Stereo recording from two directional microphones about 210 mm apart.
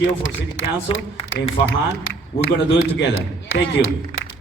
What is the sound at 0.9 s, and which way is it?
Speech, 25° left (ahead or behind).